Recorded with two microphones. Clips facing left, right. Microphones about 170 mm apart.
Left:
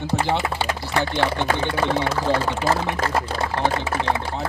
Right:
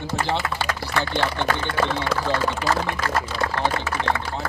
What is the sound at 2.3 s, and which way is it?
Speech, 20° left (ahead or behind).